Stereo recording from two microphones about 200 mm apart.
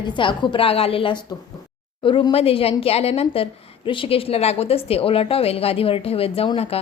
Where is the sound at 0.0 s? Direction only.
25° left (ahead or behind).